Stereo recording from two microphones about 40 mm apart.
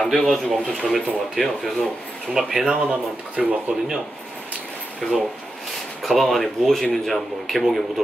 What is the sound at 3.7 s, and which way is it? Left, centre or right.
Speech, right.